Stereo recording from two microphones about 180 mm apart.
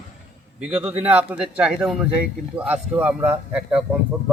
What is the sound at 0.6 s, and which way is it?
Speech, 5° right (ahead or behind).